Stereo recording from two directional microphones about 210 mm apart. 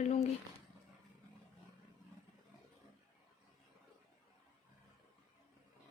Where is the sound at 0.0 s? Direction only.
30° left (ahead or behind).